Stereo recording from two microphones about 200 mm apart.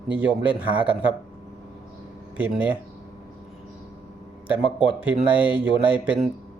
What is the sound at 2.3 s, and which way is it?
Speech, 5° right (ahead or behind).